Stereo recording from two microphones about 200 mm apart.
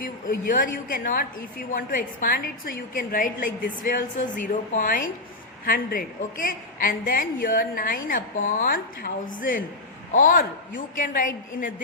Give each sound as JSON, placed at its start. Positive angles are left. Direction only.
{"t": 0.0, "sound": "a woman's voice", "side_deg": 40}